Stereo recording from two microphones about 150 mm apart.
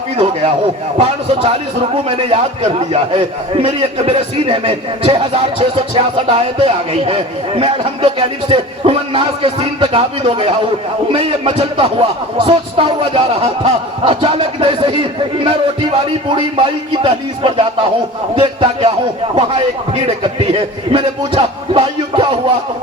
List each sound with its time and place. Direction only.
0.9 s speech: 40° right (ahead or behind)